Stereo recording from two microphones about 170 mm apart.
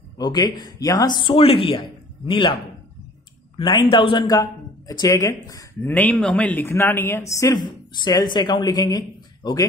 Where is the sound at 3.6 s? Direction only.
30° left (ahead or behind).